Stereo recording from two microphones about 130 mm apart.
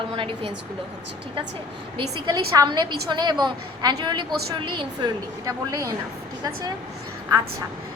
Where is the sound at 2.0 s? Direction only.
35° right (ahead or behind).